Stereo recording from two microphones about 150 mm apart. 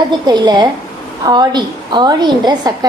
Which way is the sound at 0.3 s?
30° right (ahead or behind).